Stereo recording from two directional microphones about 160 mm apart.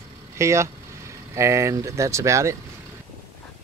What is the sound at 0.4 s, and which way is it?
Speech, 20° right (ahead or behind).